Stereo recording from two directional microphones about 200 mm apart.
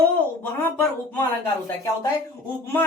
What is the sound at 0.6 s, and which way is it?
Speech, 10° left (ahead or behind).